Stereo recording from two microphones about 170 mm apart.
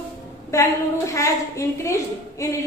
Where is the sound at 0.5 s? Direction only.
20° left (ahead or behind).